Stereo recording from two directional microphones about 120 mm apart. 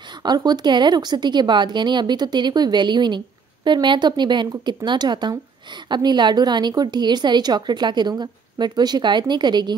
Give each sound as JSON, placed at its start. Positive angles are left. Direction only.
{"t": 0.2, "sound": "a woman's voice", "side_deg": -35}